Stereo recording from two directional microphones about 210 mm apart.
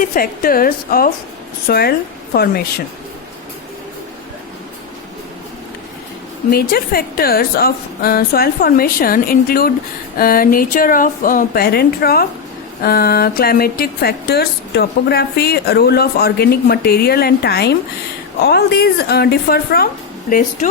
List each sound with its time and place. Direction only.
0.0 s a woman's voice: 40° left (ahead or behind)
6.5 s a woman's voice: 45° left (ahead or behind)